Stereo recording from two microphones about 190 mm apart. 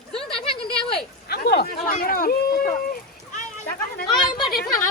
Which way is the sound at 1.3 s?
55° left (ahead or behind).